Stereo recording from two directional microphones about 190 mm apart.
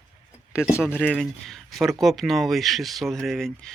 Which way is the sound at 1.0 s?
5° left (ahead or behind).